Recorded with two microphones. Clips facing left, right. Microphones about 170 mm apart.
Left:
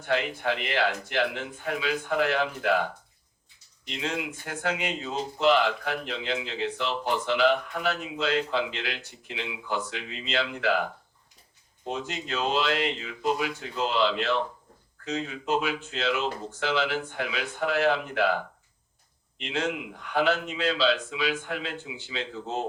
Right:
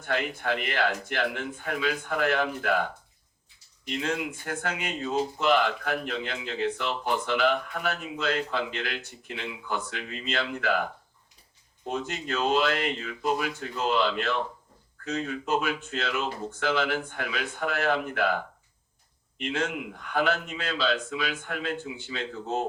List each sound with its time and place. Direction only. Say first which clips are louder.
0.0 s a man's voice: left 2 dB; 50° right (ahead or behind)
3.8 s a man's voice: right 2 dB; 50° right (ahead or behind)
11.9 s a man's voice: right 1 dB; 50° right (ahead or behind)
19.4 s a man's voice: even; 45° right (ahead or behind)